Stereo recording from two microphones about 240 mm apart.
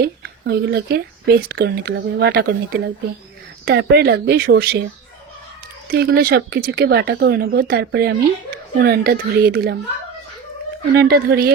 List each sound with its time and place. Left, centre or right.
0.0 s speech: right
5.9 s speech: right
10.9 s speech: right